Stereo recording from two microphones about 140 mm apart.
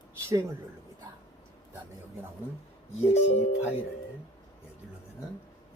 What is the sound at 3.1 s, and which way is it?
Speech, 50° left (ahead or behind).